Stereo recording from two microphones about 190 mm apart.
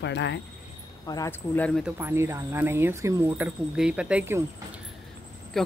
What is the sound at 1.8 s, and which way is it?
Speech, 10° right (ahead or behind).